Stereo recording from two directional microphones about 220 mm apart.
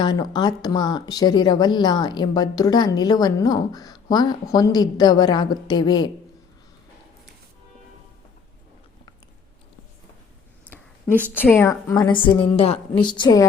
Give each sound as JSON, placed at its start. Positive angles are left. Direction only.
{"t": 0.0, "sound": "speech", "side_deg": 20}
{"t": 11.3, "sound": "a woman's voice", "side_deg": 5}
{"t": 11.7, "sound": "speech", "side_deg": 15}